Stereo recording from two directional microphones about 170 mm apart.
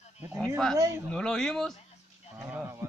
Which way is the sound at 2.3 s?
10° right (ahead or behind).